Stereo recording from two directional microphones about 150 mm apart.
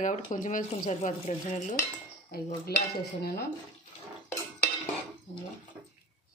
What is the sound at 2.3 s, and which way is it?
Dishes, 85° left.